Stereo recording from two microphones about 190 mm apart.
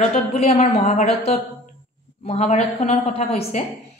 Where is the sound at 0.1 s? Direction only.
35° left (ahead or behind).